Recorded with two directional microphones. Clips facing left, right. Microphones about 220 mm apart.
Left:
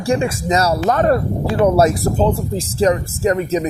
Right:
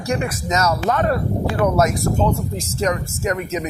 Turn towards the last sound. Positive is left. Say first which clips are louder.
# left 6 dB
turn(degrees=30)  # may be behind; listen again after turning